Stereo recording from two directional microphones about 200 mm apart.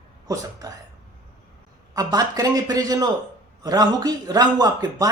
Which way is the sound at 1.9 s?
20° right (ahead or behind).